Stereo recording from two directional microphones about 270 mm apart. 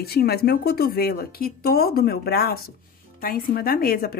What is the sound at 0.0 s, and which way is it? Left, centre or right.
A woman's voice, left.